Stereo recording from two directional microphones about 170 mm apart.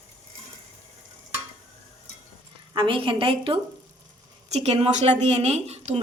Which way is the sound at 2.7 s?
30° right (ahead or behind).